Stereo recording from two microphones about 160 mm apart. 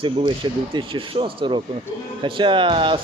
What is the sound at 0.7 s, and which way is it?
Speech, 30° right (ahead or behind).